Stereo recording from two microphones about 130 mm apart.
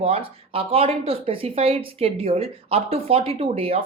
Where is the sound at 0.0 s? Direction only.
45° right (ahead or behind).